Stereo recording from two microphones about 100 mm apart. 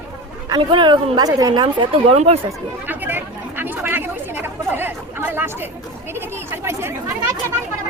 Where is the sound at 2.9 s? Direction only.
20° right (ahead or behind).